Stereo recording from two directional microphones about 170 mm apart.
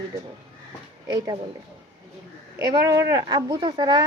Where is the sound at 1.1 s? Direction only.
25° right (ahead or behind).